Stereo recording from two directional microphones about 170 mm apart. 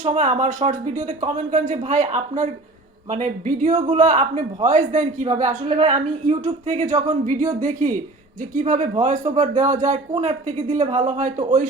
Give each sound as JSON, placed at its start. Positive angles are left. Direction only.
{"t": 0.0, "sound": "a man's voice", "side_deg": -40}